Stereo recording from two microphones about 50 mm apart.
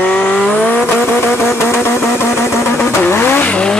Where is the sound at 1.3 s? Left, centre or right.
Left.